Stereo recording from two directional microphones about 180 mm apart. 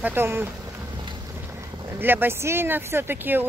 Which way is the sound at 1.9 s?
10° right (ahead or behind).